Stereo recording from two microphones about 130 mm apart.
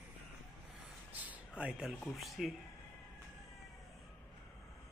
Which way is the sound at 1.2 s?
10° right (ahead or behind).